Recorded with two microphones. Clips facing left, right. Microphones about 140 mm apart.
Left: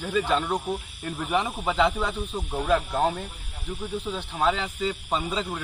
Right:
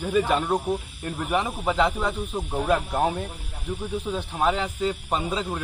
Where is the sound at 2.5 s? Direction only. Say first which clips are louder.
Even; 10° right (ahead or behind).